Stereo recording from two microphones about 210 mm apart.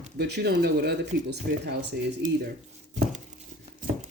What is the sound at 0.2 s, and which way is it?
Speech, 50° right (ahead or behind).